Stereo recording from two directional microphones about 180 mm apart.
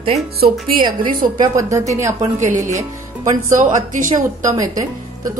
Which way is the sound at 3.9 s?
45° right (ahead or behind).